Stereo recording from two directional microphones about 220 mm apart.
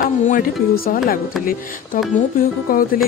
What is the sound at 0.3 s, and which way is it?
Speech, 40° left (ahead or behind).